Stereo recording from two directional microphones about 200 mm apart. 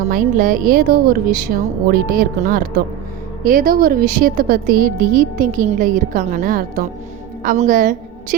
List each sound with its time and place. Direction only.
0.1 s a woman's voice: 40° right (ahead or behind)